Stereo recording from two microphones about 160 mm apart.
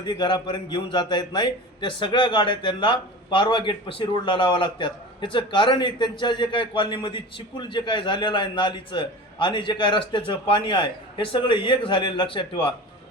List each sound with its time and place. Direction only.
0.0 s a man's voice: 30° left (ahead or behind)